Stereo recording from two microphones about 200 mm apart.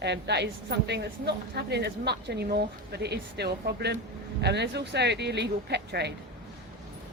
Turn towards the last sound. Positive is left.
turn(degrees=-55)  # may be behind; listen again after turning